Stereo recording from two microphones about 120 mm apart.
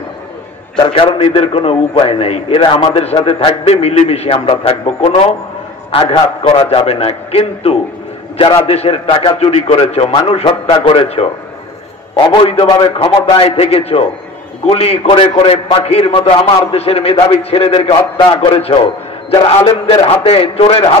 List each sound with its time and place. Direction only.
0.7 s a man's voice: 45° left (ahead or behind)
12.8 s a man's voice: 50° left (ahead or behind)
16.2 s a man's voice: 45° left (ahead or behind)